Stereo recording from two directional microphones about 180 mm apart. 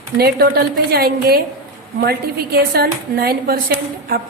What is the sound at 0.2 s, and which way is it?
Speech, 60° right (ahead or behind).